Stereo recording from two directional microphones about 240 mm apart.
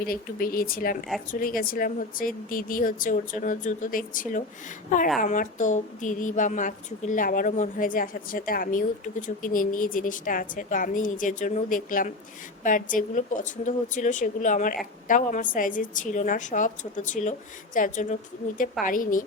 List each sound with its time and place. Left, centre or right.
0.0 s a woman's voice: left